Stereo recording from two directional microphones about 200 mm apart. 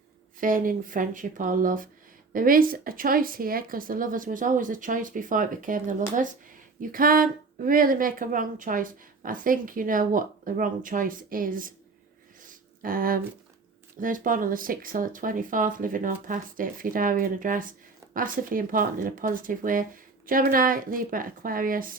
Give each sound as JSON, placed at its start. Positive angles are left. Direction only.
{"t": 0.3, "sound": "speech", "side_deg": -45}
{"t": 12.5, "sound": "a sound", "side_deg": -45}
{"t": 14.0, "sound": "speech", "side_deg": -45}